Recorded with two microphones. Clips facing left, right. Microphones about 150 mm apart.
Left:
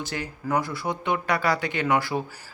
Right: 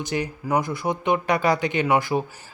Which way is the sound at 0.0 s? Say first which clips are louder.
Right 5 dB; 20° right (ahead or behind).